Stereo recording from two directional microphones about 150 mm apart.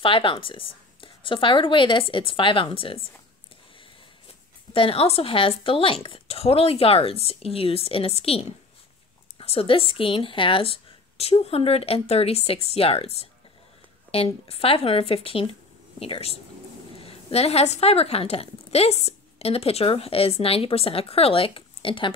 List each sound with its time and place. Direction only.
0.0 s speech: 35° left (ahead or behind)
4.7 s speech: 40° left (ahead or behind)